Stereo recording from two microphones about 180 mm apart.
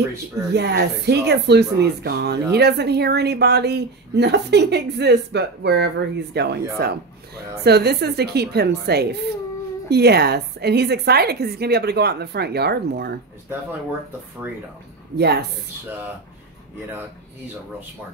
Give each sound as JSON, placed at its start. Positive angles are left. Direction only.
{"t": 0.5, "sound": "a woman's voice", "side_deg": -70}
{"t": 15.1, "sound": "a woman's voice", "side_deg": -65}